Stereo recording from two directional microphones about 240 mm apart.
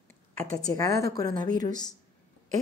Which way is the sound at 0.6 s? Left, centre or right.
Centre.